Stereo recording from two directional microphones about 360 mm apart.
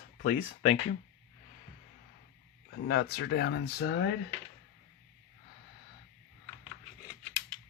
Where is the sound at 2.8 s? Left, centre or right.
Left.